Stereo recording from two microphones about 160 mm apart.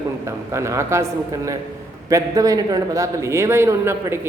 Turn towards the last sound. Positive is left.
turn(degrees=-15)  # may be behind; listen again after turning